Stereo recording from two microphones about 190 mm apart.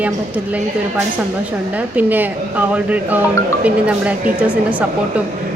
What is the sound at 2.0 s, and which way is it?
Speech, 10° right (ahead or behind).